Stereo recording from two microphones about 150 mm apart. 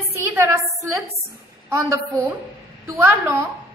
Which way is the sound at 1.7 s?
20° right (ahead or behind).